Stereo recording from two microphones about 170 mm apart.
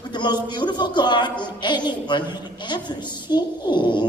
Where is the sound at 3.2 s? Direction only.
25° left (ahead or behind).